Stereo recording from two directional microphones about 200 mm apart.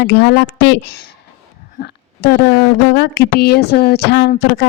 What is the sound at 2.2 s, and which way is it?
Speech, 55° left (ahead or behind).